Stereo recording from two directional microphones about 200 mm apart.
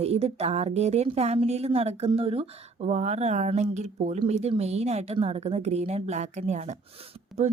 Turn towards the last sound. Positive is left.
turn(degrees=-35)  # may be behind; listen again after turning